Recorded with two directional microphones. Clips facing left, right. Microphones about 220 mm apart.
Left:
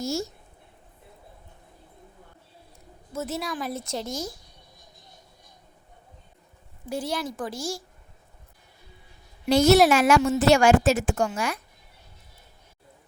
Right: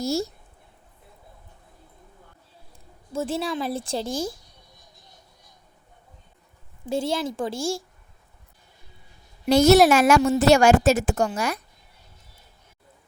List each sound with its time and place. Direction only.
0.0 s a woman's voice: 35° right (ahead or behind)
3.1 s a woman's voice: 30° right (ahead or behind)
6.8 s a woman's voice: 25° right (ahead or behind)
9.5 s a woman's voice: 45° right (ahead or behind)